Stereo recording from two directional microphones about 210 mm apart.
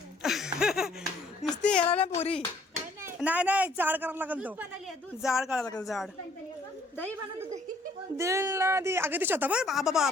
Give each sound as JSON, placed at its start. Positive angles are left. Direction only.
{"t": 0.2, "sound": "a sound", "side_deg": 0}
{"t": 1.9, "sound": "speech", "side_deg": 30}
{"t": 3.0, "sound": "speech", "side_deg": -10}
{"t": 8.1, "sound": "speech", "side_deg": -15}